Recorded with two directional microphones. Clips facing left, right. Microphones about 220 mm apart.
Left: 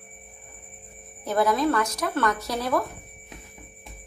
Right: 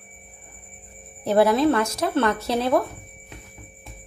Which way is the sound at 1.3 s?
30° right (ahead or behind).